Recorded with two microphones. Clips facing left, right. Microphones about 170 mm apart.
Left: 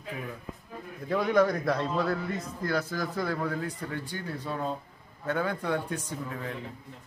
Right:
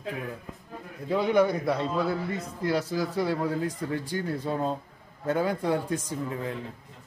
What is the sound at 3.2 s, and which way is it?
Speech, 30° right (ahead or behind).